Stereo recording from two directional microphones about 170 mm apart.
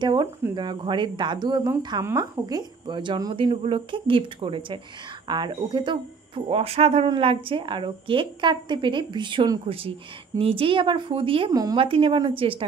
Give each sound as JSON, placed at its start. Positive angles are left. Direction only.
{"t": 0.0, "sound": "a woman's voice", "side_deg": -30}
{"t": 11.5, "sound": "a woman's voice", "side_deg": -20}
{"t": 11.8, "sound": "speech", "side_deg": -30}